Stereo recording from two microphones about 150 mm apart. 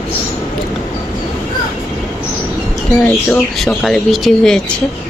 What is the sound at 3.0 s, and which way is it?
Speech, 5° left (ahead or behind).